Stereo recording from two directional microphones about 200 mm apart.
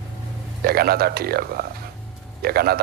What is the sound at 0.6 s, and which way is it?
Speech, 50° right (ahead or behind).